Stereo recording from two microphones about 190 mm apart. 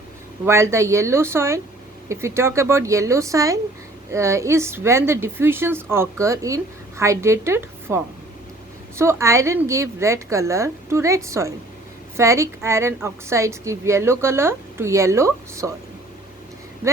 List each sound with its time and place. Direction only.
0.4 s a woman's voice: 15° right (ahead or behind)